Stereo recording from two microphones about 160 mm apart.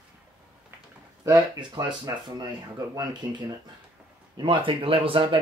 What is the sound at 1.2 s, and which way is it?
Speech, 25° right (ahead or behind).